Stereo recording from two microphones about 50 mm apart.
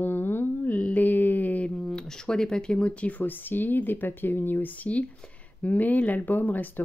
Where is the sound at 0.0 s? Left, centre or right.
Left.